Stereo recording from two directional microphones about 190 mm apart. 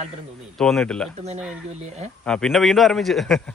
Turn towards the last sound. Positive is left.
turn(degrees=0)  # may be behind; listen again after turning